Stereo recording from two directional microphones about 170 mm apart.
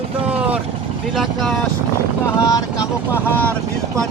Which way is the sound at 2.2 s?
20° left (ahead or behind).